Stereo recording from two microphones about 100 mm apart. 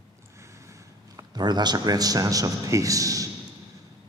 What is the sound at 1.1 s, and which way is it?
A man's voice, 45° right (ahead or behind).